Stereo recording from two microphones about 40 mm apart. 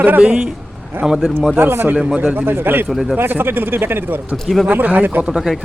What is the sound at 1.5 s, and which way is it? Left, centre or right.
Speech, right.